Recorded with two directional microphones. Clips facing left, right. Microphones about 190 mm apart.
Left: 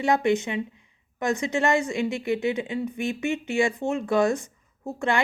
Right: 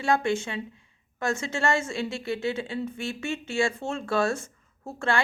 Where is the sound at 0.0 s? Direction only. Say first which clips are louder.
Left 3 dB; 20° left (ahead or behind).